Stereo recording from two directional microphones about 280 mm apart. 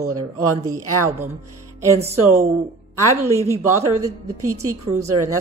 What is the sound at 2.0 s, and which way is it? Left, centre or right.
Speech, centre.